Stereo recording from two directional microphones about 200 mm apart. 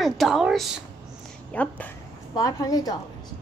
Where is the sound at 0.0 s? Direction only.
Centre (ahead or behind).